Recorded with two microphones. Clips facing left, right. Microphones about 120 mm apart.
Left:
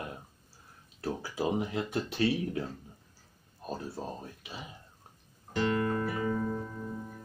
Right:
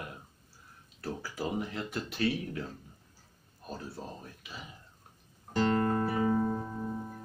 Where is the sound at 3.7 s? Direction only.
25° left (ahead or behind).